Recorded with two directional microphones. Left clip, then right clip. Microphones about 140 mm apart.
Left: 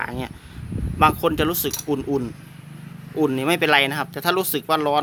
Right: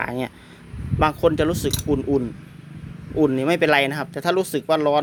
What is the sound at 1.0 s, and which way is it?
Speech, 25° right (ahead or behind).